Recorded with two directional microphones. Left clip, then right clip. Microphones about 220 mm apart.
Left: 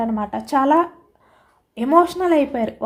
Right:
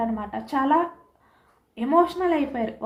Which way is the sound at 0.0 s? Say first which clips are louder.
Left 5 dB; 50° left (ahead or behind).